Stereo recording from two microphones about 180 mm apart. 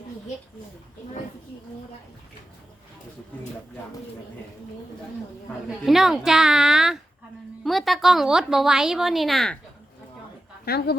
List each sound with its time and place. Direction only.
5.6 s a woman's voice: centre (ahead or behind)
10.7 s a woman's voice: 60° left (ahead or behind)